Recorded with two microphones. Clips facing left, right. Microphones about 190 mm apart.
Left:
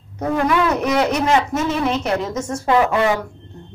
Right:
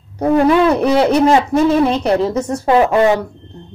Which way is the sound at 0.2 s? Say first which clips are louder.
Right 7 dB; 30° right (ahead or behind).